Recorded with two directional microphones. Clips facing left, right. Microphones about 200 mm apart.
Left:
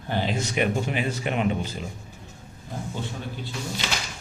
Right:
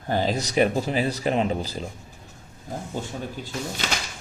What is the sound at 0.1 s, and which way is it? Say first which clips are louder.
Speech: right 3 dB; 40° right (ahead or behind).